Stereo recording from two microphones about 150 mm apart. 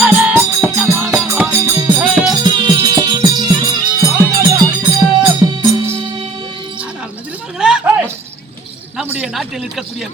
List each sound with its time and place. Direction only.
0.0 s music: 10° right (ahead or behind)
2.3 s music: 30° right (ahead or behind)
7.6 s keys jangling: 5° right (ahead or behind)
9.0 s a sound: 5° right (ahead or behind)